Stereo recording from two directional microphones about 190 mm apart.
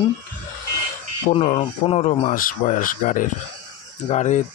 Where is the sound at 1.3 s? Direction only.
30° left (ahead or behind).